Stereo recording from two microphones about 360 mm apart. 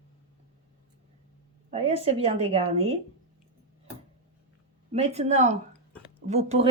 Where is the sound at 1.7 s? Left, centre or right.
Centre.